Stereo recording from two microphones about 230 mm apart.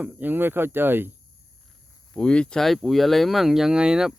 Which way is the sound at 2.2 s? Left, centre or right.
Centre.